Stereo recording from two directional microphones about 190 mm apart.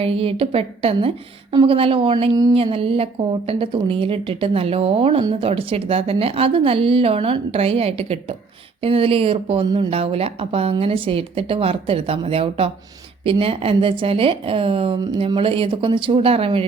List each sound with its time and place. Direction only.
0.0 s a woman's voice: 30° right (ahead or behind)